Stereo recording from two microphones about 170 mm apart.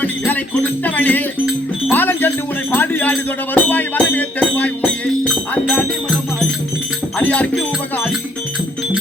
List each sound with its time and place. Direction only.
0.0 s music: 10° left (ahead or behind)
2.7 s speech: 10° left (ahead or behind)
5.3 s music: centre (ahead or behind)
7.2 s music: 5° left (ahead or behind)